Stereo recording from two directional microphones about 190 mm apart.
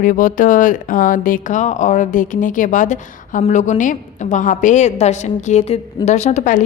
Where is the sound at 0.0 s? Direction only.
45° left (ahead or behind).